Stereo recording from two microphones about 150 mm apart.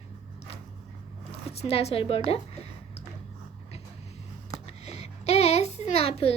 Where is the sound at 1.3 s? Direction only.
40° left (ahead or behind).